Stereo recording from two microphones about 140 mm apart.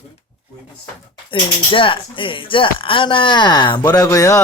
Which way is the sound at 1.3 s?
40° left (ahead or behind).